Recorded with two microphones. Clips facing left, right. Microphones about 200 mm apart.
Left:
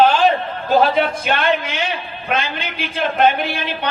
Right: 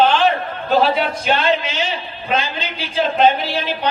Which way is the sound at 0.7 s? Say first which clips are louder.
Left 1 dB; 50° left (ahead or behind).